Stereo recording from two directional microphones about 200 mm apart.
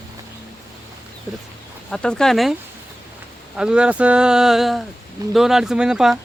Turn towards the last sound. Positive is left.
turn(degrees=-5)  # may be behind; listen again after turning